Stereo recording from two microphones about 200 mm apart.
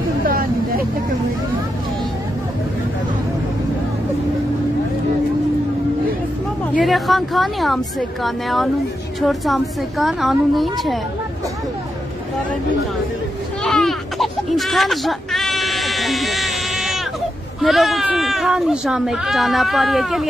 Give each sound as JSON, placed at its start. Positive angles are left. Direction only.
{"t": 0.3, "sound": "hubbub", "side_deg": -45}
{"t": 6.7, "sound": "speech", "side_deg": 0}
{"t": 13.7, "sound": "a sound", "side_deg": 0}
{"t": 17.6, "sound": "speech", "side_deg": 0}